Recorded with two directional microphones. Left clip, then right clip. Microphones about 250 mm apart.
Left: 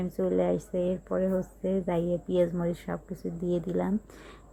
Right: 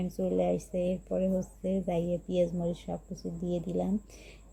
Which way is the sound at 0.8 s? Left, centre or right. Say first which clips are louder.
Left 2 dB; centre.